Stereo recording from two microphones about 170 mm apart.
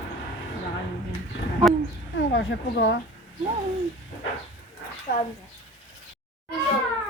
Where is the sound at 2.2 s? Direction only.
90° left.